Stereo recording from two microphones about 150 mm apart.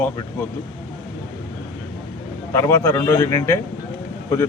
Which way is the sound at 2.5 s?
20° left (ahead or behind).